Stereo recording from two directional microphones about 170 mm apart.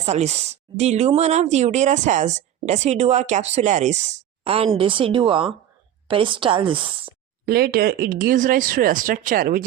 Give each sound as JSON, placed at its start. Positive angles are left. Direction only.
{"t": 0.0, "sound": "a woman's voice", "side_deg": -40}
{"t": 7.4, "sound": "speech", "side_deg": -65}